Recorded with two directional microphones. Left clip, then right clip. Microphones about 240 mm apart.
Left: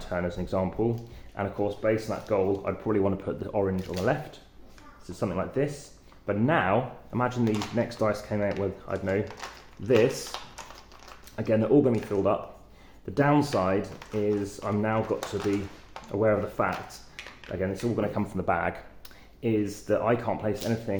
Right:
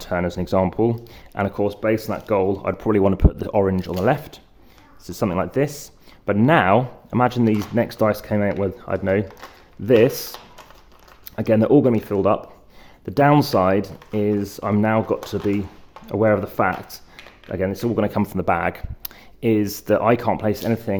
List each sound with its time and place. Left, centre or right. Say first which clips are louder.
0.0 s speech: right 7 dB; right
9.4 s a sound: even; centre
9.8 s speech: right 7 dB; right
11.3 s speech: right 7 dB; right